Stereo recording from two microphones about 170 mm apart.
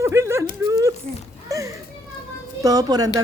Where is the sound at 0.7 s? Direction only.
20° right (ahead or behind).